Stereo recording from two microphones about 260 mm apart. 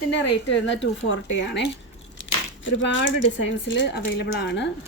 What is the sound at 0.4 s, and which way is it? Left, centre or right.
Speech, left.